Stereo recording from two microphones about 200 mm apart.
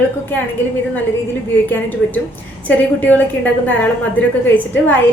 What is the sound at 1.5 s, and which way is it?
A woman's voice, 10° left (ahead or behind).